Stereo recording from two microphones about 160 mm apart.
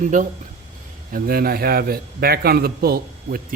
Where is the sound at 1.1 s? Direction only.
65° right (ahead or behind).